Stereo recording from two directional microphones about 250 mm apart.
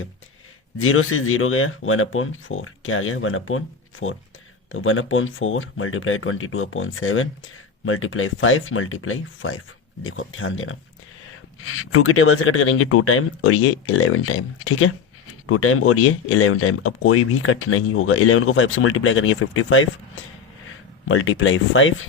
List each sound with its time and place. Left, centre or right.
0.8 s speech: left
21.1 s speech: left